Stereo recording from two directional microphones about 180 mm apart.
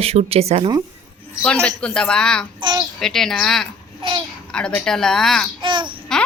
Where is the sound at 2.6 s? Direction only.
25° right (ahead or behind).